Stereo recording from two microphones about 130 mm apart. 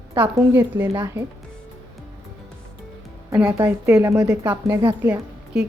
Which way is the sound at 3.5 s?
20° right (ahead or behind).